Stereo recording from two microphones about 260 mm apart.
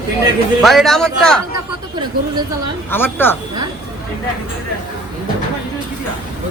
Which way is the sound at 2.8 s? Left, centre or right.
Centre.